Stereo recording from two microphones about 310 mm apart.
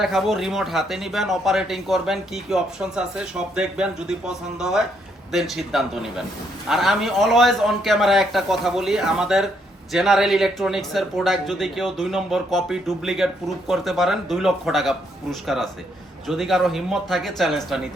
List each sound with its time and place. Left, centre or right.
0.0 s speech: centre